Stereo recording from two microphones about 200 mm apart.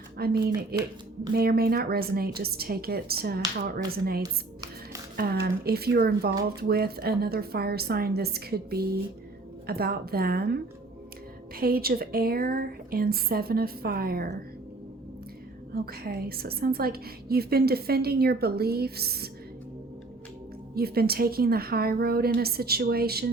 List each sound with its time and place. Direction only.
0.2 s a woman's voice: 50° right (ahead or behind)
15.7 s a woman's voice: 50° right (ahead or behind)
20.7 s a woman's voice: 50° right (ahead or behind)